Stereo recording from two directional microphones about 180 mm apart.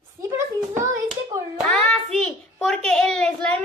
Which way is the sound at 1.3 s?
15° right (ahead or behind).